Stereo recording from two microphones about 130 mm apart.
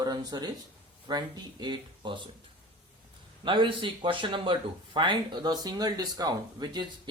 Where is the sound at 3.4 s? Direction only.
40° right (ahead or behind).